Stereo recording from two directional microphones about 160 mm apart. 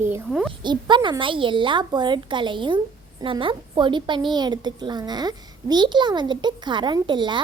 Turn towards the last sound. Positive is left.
turn(degrees=-30)  # may be behind; listen again after turning